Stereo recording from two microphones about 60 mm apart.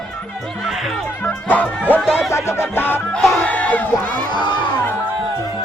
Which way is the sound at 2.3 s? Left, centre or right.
Left.